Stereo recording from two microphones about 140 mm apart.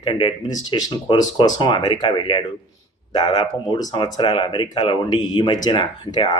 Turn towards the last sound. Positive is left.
turn(degrees=30)  # may be behind; listen again after turning